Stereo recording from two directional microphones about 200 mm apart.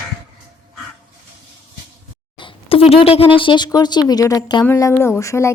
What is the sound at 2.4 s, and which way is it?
Speech, 25° left (ahead or behind).